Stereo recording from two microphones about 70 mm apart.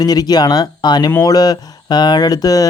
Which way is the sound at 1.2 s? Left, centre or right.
Left.